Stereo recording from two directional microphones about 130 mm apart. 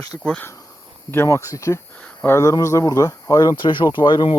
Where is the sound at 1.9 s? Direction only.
10° left (ahead or behind).